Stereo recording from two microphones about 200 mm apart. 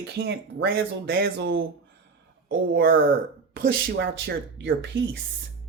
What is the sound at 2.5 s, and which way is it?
Speech, 50° right (ahead or behind).